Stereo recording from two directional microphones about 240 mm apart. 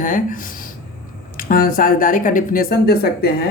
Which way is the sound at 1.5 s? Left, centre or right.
Left.